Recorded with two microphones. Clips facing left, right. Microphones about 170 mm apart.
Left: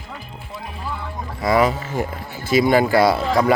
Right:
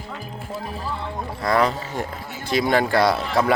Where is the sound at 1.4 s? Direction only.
5° left (ahead or behind).